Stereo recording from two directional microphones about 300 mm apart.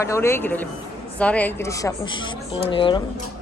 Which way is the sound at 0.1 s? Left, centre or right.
Centre.